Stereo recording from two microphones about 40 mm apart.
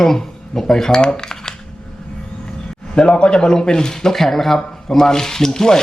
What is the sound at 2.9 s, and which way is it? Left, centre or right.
Speech, left.